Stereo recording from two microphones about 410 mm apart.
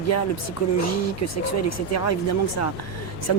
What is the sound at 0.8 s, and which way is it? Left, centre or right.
Speech, left.